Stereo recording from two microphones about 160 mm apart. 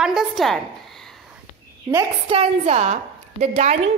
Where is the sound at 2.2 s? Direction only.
40° right (ahead or behind).